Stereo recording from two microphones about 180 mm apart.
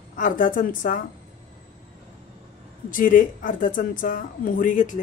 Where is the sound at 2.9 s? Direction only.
50° left (ahead or behind).